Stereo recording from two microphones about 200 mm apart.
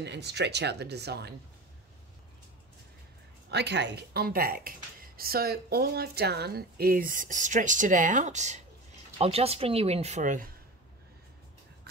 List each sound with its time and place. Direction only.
0.0 s speech: 55° right (ahead or behind)
3.4 s speech: 60° right (ahead or behind); by 10.5 s 40° right (ahead or behind)